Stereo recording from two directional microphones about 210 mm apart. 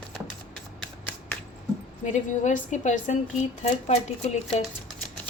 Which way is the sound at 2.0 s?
35° left (ahead or behind).